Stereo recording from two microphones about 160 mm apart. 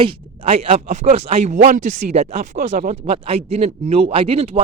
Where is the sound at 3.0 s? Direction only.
40° right (ahead or behind).